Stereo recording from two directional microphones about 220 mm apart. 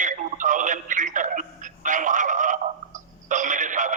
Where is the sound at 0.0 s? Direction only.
35° right (ahead or behind).